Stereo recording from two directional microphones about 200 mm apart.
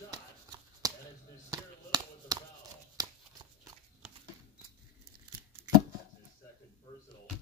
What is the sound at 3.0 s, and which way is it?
Shuffling cards, 20° right (ahead or behind).